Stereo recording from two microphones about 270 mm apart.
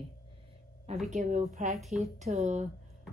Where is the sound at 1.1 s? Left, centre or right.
Right.